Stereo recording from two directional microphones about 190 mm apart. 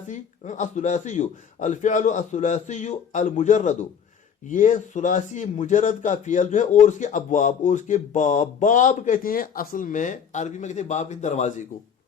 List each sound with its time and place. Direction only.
0.1 s speech: 40° left (ahead or behind)